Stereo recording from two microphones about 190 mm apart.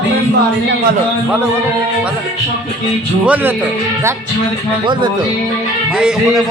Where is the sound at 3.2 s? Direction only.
5° right (ahead or behind).